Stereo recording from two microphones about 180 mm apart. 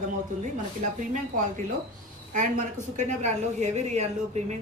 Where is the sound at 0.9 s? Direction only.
45° right (ahead or behind).